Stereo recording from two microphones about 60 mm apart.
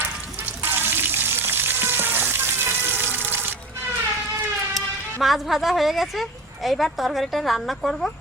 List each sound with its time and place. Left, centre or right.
0.6 s frying: right
5.2 s a woman's voice: centre